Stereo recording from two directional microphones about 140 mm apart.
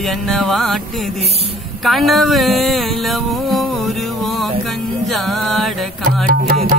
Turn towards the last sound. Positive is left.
turn(degrees=-90)